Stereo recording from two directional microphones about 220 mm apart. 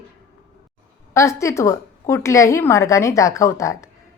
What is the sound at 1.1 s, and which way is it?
A woman's voice, 15° left (ahead or behind).